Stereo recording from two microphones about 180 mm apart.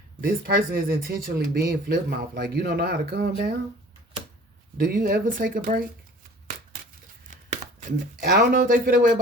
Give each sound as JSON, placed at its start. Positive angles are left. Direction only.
{"t": 0.2, "sound": "speech", "side_deg": -55}
{"t": 4.8, "sound": "speech", "side_deg": -55}
{"t": 7.3, "sound": "tearing", "side_deg": -45}
{"t": 8.4, "sound": "speech", "side_deg": -50}